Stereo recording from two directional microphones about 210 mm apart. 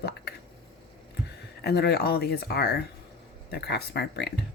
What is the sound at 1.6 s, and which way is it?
Speech, 50° left (ahead or behind).